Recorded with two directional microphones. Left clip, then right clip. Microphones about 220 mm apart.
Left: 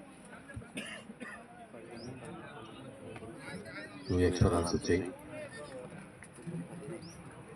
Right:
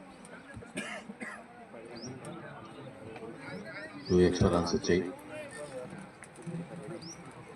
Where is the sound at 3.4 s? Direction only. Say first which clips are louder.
Right 1 dB; 50° left (ahead or behind).